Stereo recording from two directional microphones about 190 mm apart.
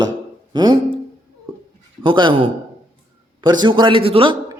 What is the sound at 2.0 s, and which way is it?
A man's voice, 25° right (ahead or behind).